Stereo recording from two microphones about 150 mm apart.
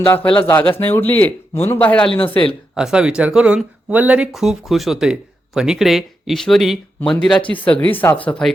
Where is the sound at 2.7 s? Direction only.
5° right (ahead or behind).